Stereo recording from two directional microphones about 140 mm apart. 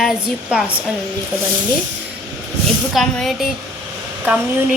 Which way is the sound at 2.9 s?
Centre (ahead or behind).